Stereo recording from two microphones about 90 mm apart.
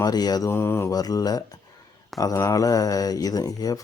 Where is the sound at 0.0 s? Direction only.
45° left (ahead or behind).